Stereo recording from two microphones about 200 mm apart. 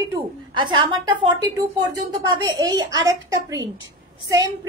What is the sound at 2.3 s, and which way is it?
A woman's voice, 20° right (ahead or behind).